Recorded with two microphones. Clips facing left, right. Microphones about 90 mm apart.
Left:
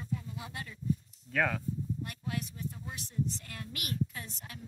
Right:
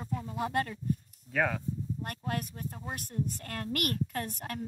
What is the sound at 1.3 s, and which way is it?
Speech, 10° right (ahead or behind).